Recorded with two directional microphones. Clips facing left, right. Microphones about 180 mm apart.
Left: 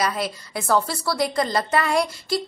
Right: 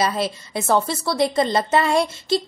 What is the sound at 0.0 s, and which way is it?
A woman's voice, 25° right (ahead or behind).